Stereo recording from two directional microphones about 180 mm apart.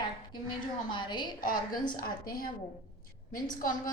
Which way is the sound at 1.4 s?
50° left (ahead or behind).